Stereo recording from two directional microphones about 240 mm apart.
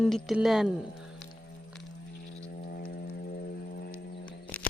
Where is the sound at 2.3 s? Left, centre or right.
Left.